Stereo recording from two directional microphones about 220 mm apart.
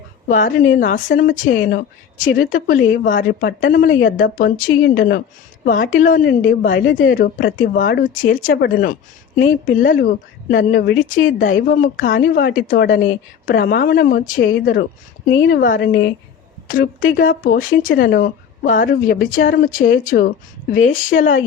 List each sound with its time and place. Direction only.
0.3 s speech: 35° left (ahead or behind)
15.9 s speech: 55° left (ahead or behind)
16.6 s speech: 40° left (ahead or behind)